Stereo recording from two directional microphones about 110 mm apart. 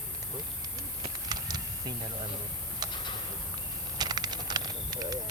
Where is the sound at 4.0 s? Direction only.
40° right (ahead or behind).